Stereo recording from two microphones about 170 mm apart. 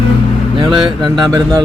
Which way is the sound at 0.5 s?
30° right (ahead or behind).